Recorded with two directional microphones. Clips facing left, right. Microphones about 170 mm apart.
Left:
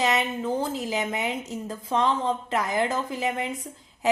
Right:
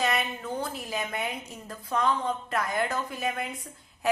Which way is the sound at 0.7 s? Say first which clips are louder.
Left 8 dB; 90° left.